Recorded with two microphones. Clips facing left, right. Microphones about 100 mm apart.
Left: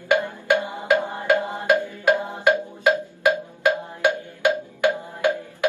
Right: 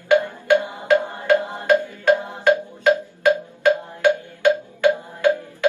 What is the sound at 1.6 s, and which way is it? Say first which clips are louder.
Music: right 2 dB; 20° left (ahead or behind).